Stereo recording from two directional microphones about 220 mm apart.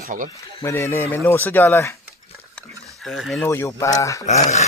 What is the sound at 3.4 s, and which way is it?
Speech, 10° left (ahead or behind).